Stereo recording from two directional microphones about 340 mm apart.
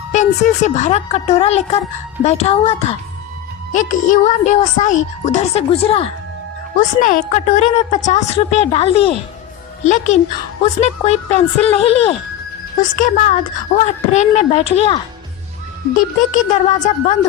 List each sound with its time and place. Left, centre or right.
0.1 s a woman's voice: left
10.6 s a woman's voice: centre
16.3 s a woman's voice: left